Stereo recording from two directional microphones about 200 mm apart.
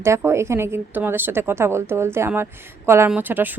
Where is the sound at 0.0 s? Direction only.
15° right (ahead or behind).